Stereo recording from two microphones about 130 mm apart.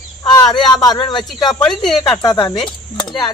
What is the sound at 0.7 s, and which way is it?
Speech, 30° left (ahead or behind).